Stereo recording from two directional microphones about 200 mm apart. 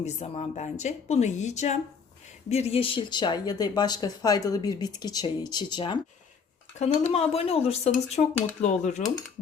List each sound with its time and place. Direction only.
0.0 s speech: 35° left (ahead or behind)
7.1 s speech: 30° left (ahead or behind)